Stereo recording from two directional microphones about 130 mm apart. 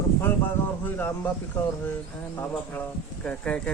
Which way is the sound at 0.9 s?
15° left (ahead or behind).